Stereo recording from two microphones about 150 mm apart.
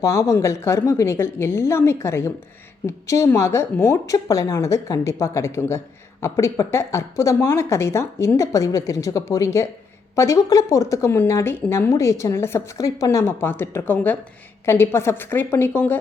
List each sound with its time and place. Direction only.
0.0 s a woman's voice: 20° left (ahead or behind)